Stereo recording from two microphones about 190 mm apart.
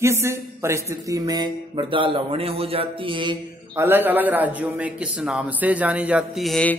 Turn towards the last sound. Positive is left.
turn(degrees=5)  # may be behind; listen again after turning